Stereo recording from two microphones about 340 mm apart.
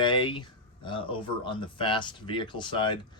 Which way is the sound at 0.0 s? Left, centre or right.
Centre.